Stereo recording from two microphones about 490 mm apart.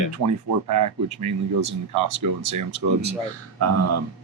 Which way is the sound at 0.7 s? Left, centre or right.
Right.